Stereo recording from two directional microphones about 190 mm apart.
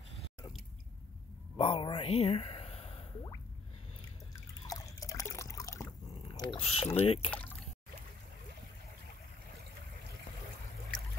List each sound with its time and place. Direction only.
1.6 s drip: 30° left (ahead or behind)
4.6 s liquid: 15° left (ahead or behind)
6.6 s speech: 30° left (ahead or behind)
7.2 s speech: 10° left (ahead or behind)